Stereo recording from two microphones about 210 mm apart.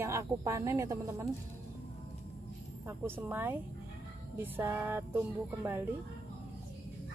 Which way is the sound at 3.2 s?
10° right (ahead or behind).